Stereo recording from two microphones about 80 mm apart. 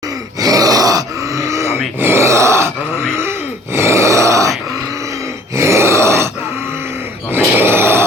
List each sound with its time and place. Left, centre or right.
0.3 s groan: right
2.0 s grunt: right
5.5 s groan: right
7.3 s grunt: right